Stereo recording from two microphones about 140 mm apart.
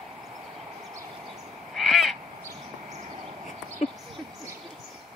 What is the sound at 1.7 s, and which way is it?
Crow, centre (ahead or behind).